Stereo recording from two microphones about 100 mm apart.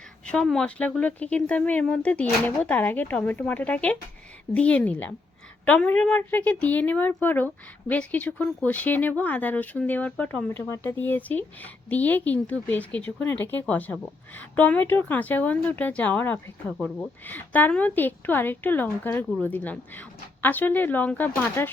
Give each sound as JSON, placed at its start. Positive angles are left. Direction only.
{"t": 0.3, "sound": "a woman's voice", "side_deg": 5}